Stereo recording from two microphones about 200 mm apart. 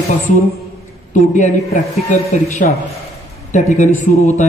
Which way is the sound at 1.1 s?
40° left (ahead or behind).